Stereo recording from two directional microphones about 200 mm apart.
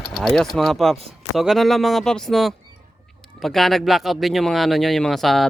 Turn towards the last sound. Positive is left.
turn(degrees=0)  # may be behind; listen again after turning